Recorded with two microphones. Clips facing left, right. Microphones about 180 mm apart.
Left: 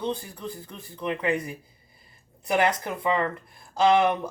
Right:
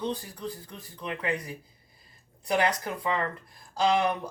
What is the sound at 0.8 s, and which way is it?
Speech, 25° left (ahead or behind).